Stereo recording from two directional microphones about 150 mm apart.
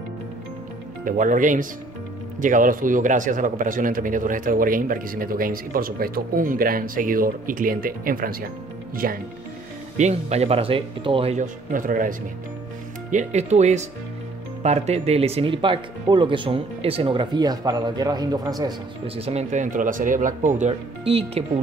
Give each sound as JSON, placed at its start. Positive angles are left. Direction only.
{"t": 1.0, "sound": "speech", "side_deg": -60}
{"t": 9.9, "sound": "speech", "side_deg": -50}
{"t": 11.3, "sound": "speech", "side_deg": -60}
{"t": 13.1, "sound": "speech", "side_deg": -50}
{"t": 19.0, "sound": "speech", "side_deg": -40}
{"t": 21.0, "sound": "speech", "side_deg": -40}